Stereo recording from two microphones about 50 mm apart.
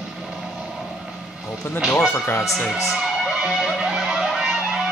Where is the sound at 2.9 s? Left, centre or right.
Centre.